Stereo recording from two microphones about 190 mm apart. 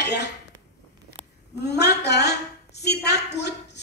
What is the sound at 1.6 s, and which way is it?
A woman's voice, 60° left (ahead or behind).